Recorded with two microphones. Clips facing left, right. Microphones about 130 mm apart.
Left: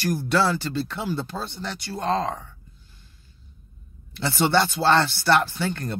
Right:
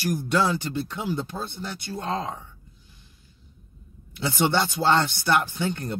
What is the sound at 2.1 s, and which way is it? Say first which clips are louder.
Speech: left 5 dB; 80° left.